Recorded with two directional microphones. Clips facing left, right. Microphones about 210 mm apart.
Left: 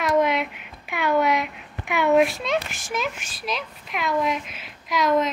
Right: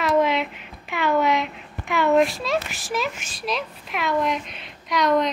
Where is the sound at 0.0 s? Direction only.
Centre (ahead or behind).